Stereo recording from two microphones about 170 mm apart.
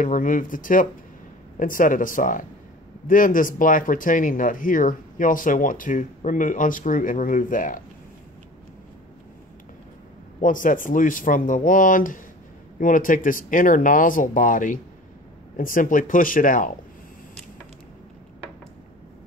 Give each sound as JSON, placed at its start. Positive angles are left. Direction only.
{"t": 0.0, "sound": "speech", "side_deg": 50}
{"t": 10.4, "sound": "speech", "side_deg": 50}